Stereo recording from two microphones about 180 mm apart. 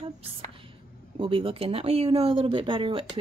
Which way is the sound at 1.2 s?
30° right (ahead or behind).